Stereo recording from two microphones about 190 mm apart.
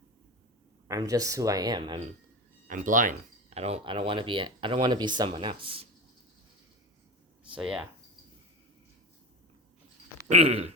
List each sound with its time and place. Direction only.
0.9 s speech: 20° right (ahead or behind)
2.6 s speech: 45° right (ahead or behind); by 5.9 s 30° right (ahead or behind)
7.5 s speech: 5° right (ahead or behind)
10.2 s a sound: 35° right (ahead or behind)